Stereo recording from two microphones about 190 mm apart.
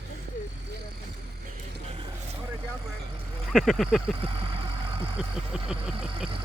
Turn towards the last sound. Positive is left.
turn(degrees=-5)  # may be behind; listen again after turning